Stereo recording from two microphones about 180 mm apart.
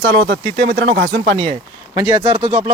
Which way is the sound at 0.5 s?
35° right (ahead or behind).